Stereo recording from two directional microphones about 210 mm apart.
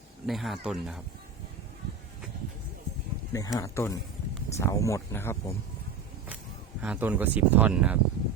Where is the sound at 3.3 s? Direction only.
15° left (ahead or behind).